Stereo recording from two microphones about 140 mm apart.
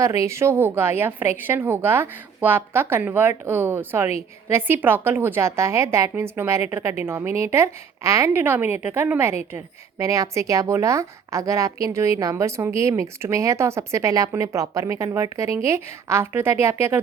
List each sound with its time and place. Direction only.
0.0 s a woman's voice: 20° right (ahead or behind)